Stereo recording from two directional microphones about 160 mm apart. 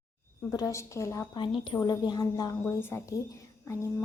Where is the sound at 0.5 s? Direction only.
20° left (ahead or behind).